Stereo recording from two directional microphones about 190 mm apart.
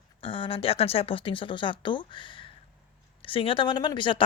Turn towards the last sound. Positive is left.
turn(degrees=25)  # may be behind; listen again after turning